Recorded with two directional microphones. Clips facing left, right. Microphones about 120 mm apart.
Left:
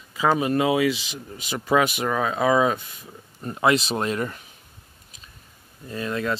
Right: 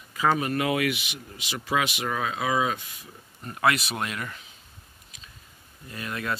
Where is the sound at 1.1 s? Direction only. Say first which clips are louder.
Left 5 dB; 40° left (ahead or behind).